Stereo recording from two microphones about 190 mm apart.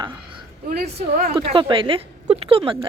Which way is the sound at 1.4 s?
25° right (ahead or behind).